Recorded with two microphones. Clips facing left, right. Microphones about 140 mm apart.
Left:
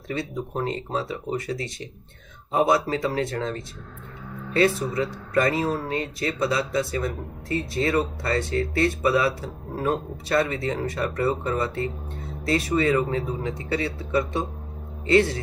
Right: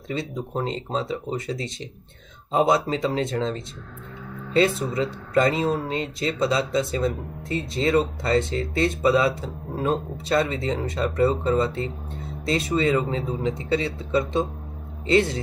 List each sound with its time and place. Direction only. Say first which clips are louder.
0.1 s speech: right 1 dB; 20° right (ahead or behind)